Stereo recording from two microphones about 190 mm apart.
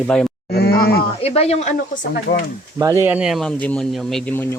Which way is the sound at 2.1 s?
55° left (ahead or behind).